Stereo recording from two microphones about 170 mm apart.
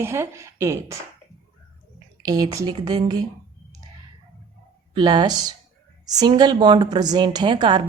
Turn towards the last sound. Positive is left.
turn(degrees=-25)  # may be behind; listen again after turning